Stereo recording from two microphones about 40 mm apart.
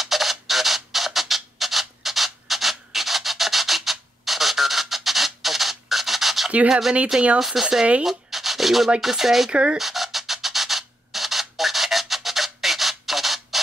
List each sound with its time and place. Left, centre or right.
0.0 s a sound: centre
6.7 s speech: centre
8.0 s sanding: centre
9.0 s speech: centre
9.5 s speech: right
9.8 s a sound: centre